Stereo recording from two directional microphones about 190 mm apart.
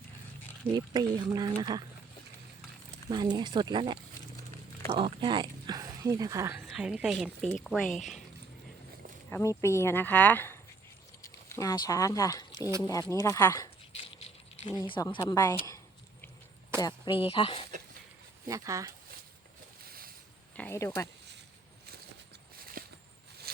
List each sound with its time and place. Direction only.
0.8 s speech: 20° right (ahead or behind)
3.1 s speech: 20° right (ahead or behind)
6.7 s a woman's voice: 5° right (ahead or behind)
9.3 s speech: 15° left (ahead or behind)
13.9 s keys jangling: 30° left (ahead or behind)
15.0 s speech: 20° left (ahead or behind)
16.8 s speech: 25° left (ahead or behind)
18.4 s speech: 15° right (ahead or behind)
19.8 s boat: 50° right (ahead or behind)
20.6 s speech: 15° left (ahead or behind)
22.8 s a sound: 45° right (ahead or behind)